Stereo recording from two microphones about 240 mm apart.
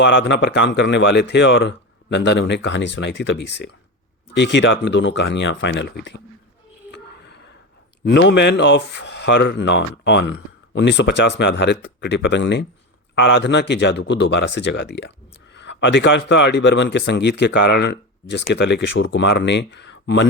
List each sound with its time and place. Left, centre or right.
0.0 s speech: left
6.9 s a sound: left
8.0 s speech: left